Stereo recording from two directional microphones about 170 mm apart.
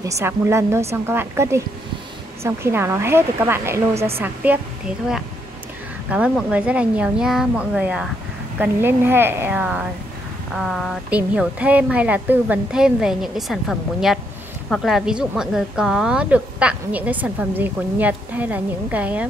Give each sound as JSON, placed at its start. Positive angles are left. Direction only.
{"t": 0.0, "sound": "a woman's voice", "side_deg": -15}
{"t": 6.0, "sound": "a woman's voice", "side_deg": -5}